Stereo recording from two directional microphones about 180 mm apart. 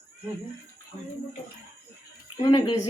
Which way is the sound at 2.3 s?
25° left (ahead or behind).